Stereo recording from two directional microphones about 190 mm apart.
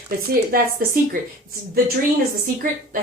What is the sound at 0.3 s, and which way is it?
Speech, 50° right (ahead or behind).